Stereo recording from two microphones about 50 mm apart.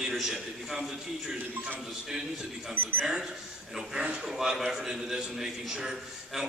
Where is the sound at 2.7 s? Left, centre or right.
Right.